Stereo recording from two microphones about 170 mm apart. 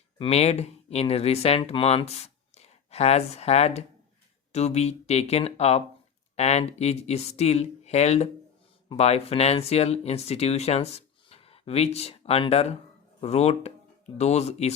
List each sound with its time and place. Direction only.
0.2 s speech: 35° left (ahead or behind)